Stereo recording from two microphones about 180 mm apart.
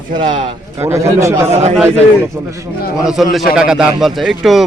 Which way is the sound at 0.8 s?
15° right (ahead or behind).